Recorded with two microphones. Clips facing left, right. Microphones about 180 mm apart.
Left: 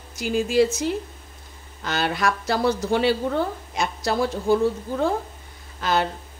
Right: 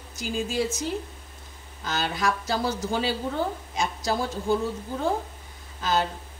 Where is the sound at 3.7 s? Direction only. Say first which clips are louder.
Left 4 dB; 65° left (ahead or behind).